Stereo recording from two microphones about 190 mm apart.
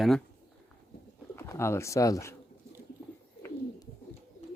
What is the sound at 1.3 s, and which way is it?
Speech, 15° left (ahead or behind).